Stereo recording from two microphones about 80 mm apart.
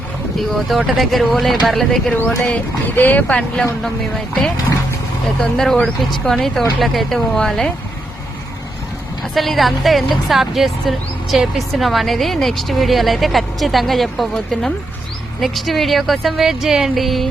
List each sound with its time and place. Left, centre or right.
0.3 s a woman's voice: centre
2.5 s speech: left
5.4 s a woman's voice: centre
9.2 s a woman's voice: centre